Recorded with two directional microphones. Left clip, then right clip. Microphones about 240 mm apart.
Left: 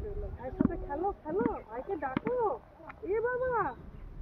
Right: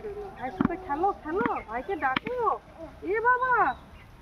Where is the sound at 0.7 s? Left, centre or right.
Right.